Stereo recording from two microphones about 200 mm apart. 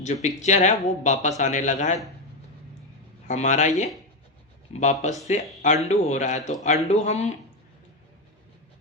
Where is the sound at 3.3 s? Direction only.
35° left (ahead or behind).